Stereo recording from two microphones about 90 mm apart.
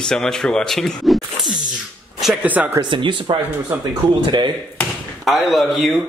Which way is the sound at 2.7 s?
65° right (ahead or behind).